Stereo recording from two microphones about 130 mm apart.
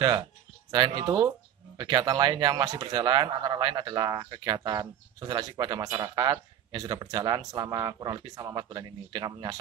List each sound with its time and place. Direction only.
0.7 s speech: 30° right (ahead or behind)